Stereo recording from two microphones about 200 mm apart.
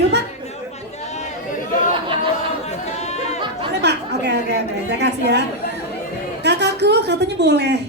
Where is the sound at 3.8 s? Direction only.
55° right (ahead or behind).